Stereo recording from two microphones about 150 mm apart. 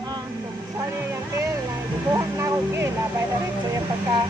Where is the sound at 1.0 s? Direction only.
15° right (ahead or behind).